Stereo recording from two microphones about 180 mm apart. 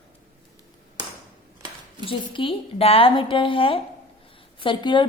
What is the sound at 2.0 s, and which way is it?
A woman's voice, 30° left (ahead or behind).